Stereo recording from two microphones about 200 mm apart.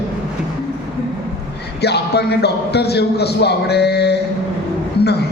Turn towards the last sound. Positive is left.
turn(degrees=55)  # may be behind; listen again after turning